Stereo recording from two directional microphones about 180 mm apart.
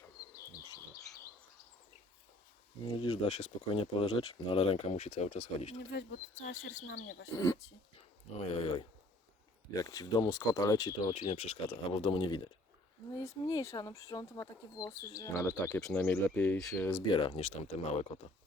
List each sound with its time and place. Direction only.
0.6 s bird: 20° left (ahead or behind)
3.0 s speech: 35° left (ahead or behind)
5.9 s speech: 65° left (ahead or behind)
7.3 s speech: 20° left (ahead or behind)
8.4 s speech: 30° left (ahead or behind)
9.7 s speech: 20° left (ahead or behind)
11.1 s speech: 35° left (ahead or behind); by 15.8 s 20° left (ahead or behind)
15.8 s speech: 5° left (ahead or behind)
17.1 s speech: 30° left (ahead or behind)